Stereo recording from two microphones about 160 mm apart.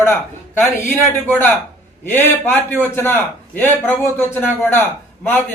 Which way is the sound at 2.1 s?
15° left (ahead or behind).